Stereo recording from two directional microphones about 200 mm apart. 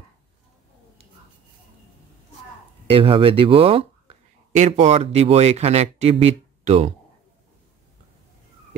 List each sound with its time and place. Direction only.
2.9 s speech: 25° right (ahead or behind)